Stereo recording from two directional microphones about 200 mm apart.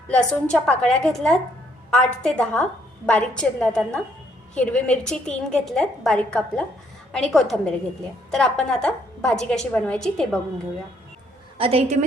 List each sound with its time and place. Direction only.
0.2 s a woman's voice: 5° left (ahead or behind)
11.5 s a woman's voice: 30° right (ahead or behind)